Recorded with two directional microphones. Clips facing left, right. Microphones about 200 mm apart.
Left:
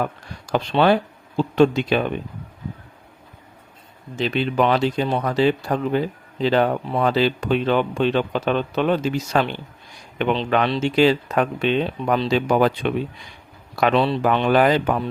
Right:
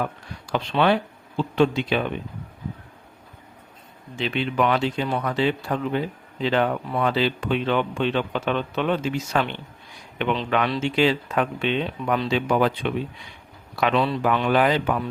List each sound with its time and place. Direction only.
0.0 s speech: 45° left (ahead or behind)
4.2 s speech: 35° left (ahead or behind)
13.9 s speech: 30° left (ahead or behind)
14.5 s speech: 45° left (ahead or behind)